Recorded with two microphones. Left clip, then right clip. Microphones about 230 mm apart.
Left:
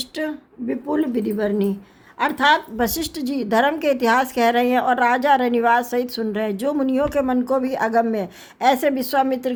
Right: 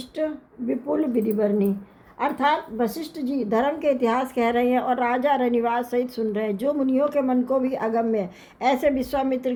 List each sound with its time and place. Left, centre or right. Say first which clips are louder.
0.2 s a woman's voice: right 3 dB; left